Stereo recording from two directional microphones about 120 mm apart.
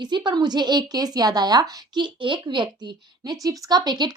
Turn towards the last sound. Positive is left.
turn(degrees=-35)  # may be behind; listen again after turning